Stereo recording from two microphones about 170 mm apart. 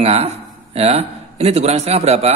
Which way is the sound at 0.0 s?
40° right (ahead or behind).